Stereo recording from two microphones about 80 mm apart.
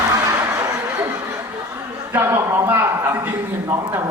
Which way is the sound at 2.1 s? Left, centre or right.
Right.